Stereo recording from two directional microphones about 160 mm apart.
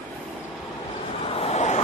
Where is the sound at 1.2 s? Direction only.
40° left (ahead or behind).